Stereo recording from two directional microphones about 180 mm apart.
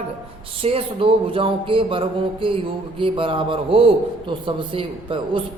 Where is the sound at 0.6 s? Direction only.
30° right (ahead or behind).